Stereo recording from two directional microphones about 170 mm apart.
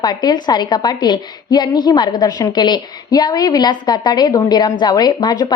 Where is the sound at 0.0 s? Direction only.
25° left (ahead or behind).